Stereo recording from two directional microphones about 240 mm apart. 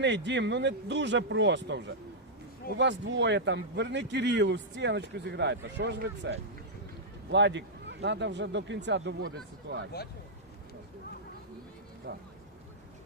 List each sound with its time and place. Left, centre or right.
0.0 s a man's voice: right
12.1 s a man's voice: right